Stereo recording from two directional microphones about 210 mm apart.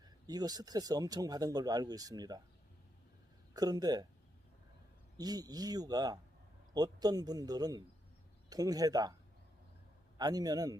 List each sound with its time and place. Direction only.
0.0 s speech: 20° right (ahead or behind)
3.5 s speech: 20° right (ahead or behind)
5.1 s speech: 20° right (ahead or behind)
10.2 s speech: 20° right (ahead or behind)